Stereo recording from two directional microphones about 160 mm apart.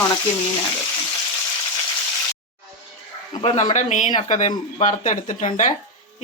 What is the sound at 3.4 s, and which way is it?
Speech, 40° left (ahead or behind).